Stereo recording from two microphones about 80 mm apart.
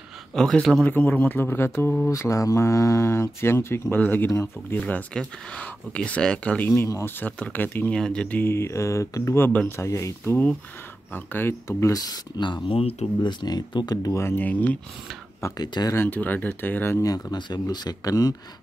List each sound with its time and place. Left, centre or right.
0.3 s speech: centre
0.8 s speech: centre
2.0 s speech: left
4.7 s speech: centre
7.9 s speech: centre
8.4 s speech: left
11.1 s speech: left
11.6 s speech: left
12.4 s speech: left
14.1 s speech: left
15.5 s speech: left
16.1 s speech: left
17.0 s speech: left